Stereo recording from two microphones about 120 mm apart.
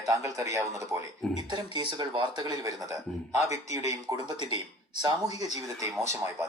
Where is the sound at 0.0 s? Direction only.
25° right (ahead or behind).